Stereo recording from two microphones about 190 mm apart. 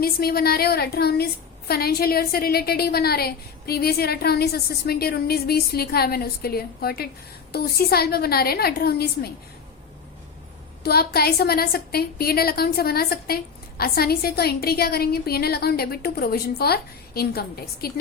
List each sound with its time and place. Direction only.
0.0 s a woman's voice: 55° left (ahead or behind)
10.8 s a woman's voice: 55° left (ahead or behind)